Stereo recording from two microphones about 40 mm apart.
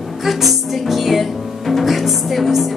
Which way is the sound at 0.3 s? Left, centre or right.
Centre.